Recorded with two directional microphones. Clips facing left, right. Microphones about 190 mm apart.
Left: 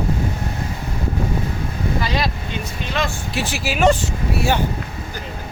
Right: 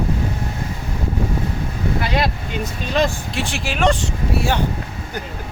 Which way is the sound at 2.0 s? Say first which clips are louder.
Right 2 dB; 55° right (ahead or behind).